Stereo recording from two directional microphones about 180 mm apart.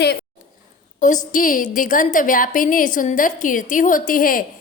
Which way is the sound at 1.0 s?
45° left (ahead or behind).